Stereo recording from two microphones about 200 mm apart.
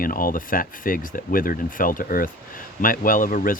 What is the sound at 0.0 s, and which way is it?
Speech, 45° left (ahead or behind).